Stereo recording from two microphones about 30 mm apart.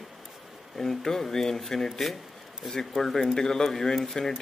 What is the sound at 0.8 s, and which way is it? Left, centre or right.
Speech, centre.